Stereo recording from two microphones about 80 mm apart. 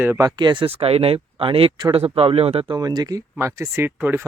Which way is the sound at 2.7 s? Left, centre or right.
Right.